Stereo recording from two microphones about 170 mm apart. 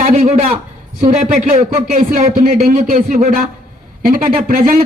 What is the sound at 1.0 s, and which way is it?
A man's voice, 50° right (ahead or behind).